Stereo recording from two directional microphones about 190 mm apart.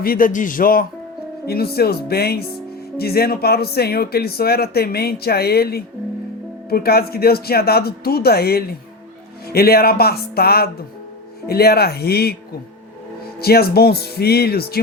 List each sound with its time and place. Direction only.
0.0 s a man's voice: 50° left (ahead or behind)
13.4 s speech: 55° left (ahead or behind)